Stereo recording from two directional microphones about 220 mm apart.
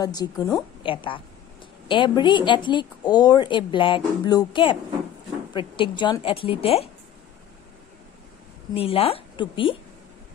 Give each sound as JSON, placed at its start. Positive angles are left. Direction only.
{"t": 0.0, "sound": "a woman's voice", "side_deg": 20}
{"t": 8.7, "sound": "a woman's voice", "side_deg": 25}